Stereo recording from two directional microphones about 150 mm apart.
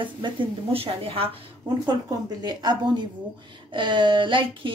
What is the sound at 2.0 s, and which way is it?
A woman's voice, 30° right (ahead or behind).